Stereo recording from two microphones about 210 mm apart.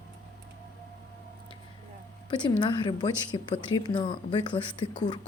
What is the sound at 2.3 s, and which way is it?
A woman's voice, 20° left (ahead or behind).